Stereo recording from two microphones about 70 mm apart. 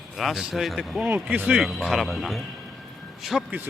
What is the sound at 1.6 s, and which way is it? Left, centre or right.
Speech, centre.